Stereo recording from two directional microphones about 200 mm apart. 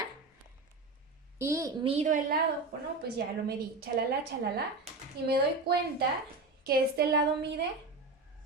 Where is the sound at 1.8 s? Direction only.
30° right (ahead or behind).